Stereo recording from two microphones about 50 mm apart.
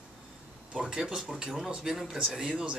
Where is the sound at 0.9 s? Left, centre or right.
Centre.